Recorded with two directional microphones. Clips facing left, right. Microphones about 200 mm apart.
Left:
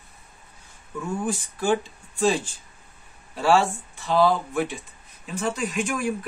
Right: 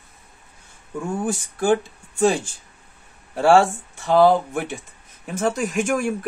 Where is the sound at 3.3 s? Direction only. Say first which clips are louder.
Right 5 dB; 50° right (ahead or behind).